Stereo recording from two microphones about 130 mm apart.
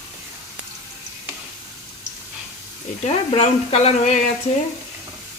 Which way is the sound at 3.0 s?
55° left (ahead or behind).